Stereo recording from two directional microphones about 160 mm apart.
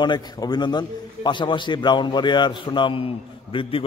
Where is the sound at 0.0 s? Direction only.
25° left (ahead or behind).